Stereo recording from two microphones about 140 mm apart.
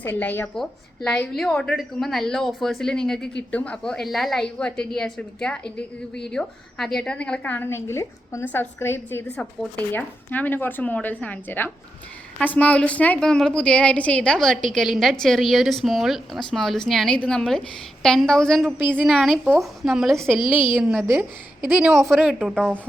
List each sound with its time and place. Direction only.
0.0 s a woman's voice: 15° left (ahead or behind)
20.4 s a woman's voice: 35° left (ahead or behind)
20.7 s a woman's voice: 5° right (ahead or behind)